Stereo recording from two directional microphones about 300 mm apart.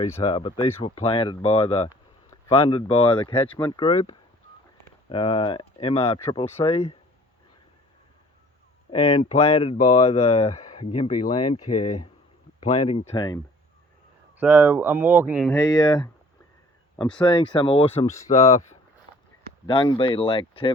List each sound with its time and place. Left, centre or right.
0.0 s speech: centre
6.1 s speech: centre
6.6 s speech: centre
8.9 s speech: left
11.6 s speech: left
12.5 s speech: left
14.3 s speech: centre
15.4 s speech: centre
17.2 s speech: centre
19.6 s speech: centre